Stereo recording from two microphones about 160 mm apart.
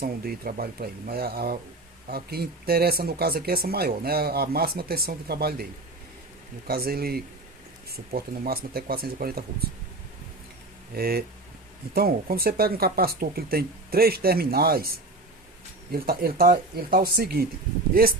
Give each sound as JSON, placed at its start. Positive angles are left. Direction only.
{"t": 0.0, "sound": "speech", "side_deg": -70}
{"t": 6.7, "sound": "speech", "side_deg": -70}
{"t": 10.9, "sound": "speech", "side_deg": -75}